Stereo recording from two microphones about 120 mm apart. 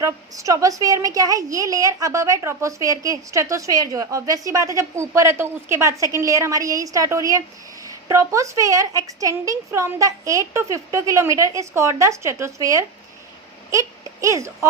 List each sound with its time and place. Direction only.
0.0 s a woman's voice: 25° right (ahead or behind)